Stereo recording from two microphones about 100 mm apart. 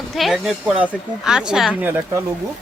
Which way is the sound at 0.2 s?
5° right (ahead or behind).